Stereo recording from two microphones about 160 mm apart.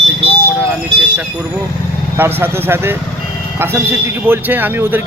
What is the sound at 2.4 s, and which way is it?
A man's voice, 15° right (ahead or behind).